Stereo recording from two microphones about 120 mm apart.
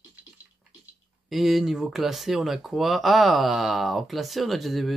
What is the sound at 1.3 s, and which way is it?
Speech, centre (ahead or behind).